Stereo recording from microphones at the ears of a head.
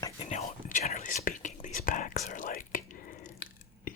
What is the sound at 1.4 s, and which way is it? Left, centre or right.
Whispering, left.